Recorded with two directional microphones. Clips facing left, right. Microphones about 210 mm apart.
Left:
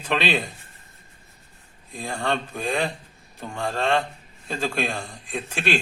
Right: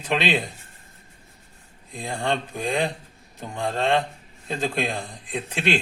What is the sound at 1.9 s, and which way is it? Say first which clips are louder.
A man's voice: even; 15° right (ahead or behind).